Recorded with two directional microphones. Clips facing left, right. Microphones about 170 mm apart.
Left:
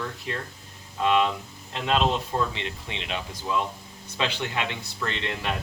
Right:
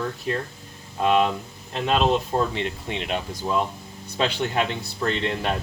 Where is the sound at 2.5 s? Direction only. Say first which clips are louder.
Right 6 dB; 50° right (ahead or behind).